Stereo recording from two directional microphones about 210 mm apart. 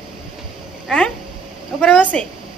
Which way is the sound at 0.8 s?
5° left (ahead or behind).